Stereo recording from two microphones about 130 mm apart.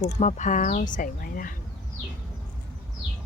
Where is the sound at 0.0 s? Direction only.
60° left (ahead or behind); by 1.5 s 90° left.